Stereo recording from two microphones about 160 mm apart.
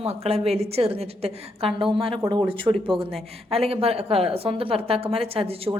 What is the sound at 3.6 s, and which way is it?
A woman's voice, 40° right (ahead or behind).